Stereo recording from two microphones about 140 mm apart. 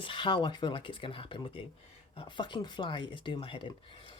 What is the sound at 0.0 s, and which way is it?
Speech, 35° left (ahead or behind).